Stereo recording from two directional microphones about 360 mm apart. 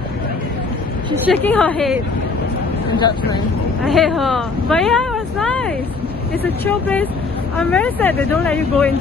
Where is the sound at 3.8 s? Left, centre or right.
Centre.